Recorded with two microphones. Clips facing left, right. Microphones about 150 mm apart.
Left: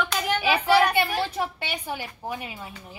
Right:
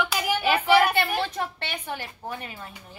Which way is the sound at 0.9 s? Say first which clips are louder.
Left 1 dB; 10° left (ahead or behind).